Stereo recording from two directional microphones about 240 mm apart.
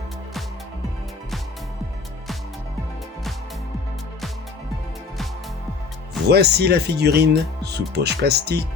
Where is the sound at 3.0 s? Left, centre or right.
Centre.